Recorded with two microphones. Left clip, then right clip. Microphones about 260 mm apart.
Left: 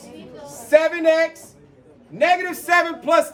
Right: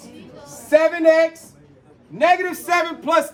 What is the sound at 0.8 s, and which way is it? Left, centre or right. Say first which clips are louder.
Speech: right 3 dB; centre.